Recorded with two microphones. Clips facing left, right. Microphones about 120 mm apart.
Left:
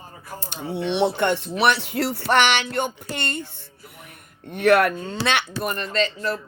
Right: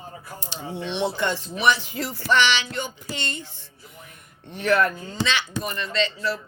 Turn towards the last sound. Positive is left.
turn(degrees=45)  # may be behind; listen again after turning